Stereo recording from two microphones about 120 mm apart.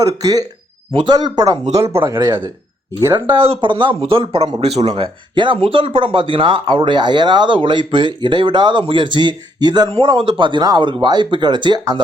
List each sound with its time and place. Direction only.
0.0 s speech: 30° right (ahead or behind)
1.8 s speech: 25° right (ahead or behind)
3.4 s speech: 50° right (ahead or behind)
4.6 s speech: 60° right (ahead or behind)
5.3 s speech: 40° right (ahead or behind)